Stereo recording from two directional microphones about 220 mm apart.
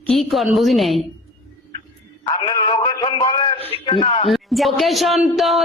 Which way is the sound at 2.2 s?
20° left (ahead or behind).